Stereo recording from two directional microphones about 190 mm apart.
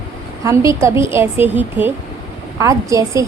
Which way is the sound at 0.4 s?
15° right (ahead or behind).